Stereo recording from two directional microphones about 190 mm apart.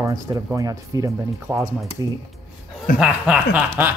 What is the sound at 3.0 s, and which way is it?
Speech, 5° right (ahead or behind).